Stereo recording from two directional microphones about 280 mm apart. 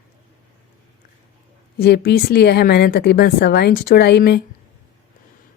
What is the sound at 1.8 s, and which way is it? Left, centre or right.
Speech, left.